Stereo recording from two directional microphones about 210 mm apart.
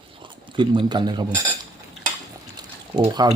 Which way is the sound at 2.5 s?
20° right (ahead or behind).